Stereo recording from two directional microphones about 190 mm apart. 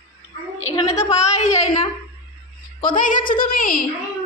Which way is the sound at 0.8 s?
35° left (ahead or behind).